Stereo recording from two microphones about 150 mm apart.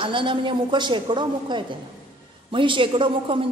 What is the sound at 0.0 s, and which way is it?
A man's voice, 35° right (ahead or behind).